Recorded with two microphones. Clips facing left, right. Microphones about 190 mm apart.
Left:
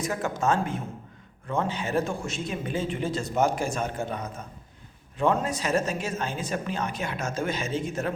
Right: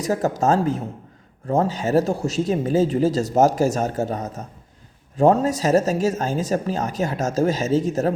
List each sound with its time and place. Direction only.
0.0 s speech: 40° right (ahead or behind)